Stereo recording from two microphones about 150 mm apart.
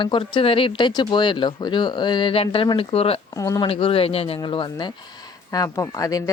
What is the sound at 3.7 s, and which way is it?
Speech, 35° left (ahead or behind).